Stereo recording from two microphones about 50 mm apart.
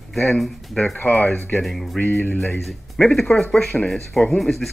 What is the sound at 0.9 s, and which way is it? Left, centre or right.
Speech, left.